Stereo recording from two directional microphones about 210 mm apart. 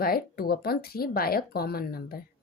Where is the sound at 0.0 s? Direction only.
45° left (ahead or behind).